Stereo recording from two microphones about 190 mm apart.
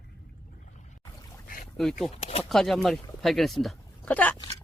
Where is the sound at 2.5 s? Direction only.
Centre (ahead or behind).